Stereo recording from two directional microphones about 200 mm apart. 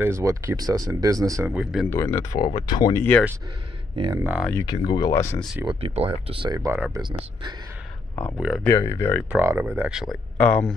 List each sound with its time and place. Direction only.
0.0 s speech: 15° right (ahead or behind)
1.5 s speech: 5° right (ahead or behind)
1.9 s speech: 15° left (ahead or behind)
3.9 s speech: 25° right (ahead or behind)
4.2 s speech: 5° right (ahead or behind)
4.5 s speech: 15° left (ahead or behind)
5.7 s speech: 25° right (ahead or behind)
8.2 s speech: 5° right (ahead or behind)
8.6 s speech: 15° left (ahead or behind)
9.3 s speech: 10° right (ahead or behind)
10.3 s speech: 5° left (ahead or behind)